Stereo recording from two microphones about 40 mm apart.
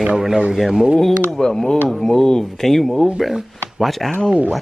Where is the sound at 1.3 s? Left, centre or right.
Centre.